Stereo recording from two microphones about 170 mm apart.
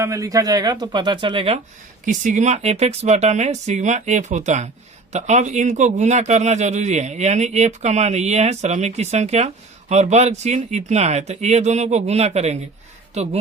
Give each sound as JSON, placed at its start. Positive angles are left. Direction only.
{"t": 0.0, "sound": "speech", "side_deg": -20}
{"t": 2.0, "sound": "speech", "side_deg": -45}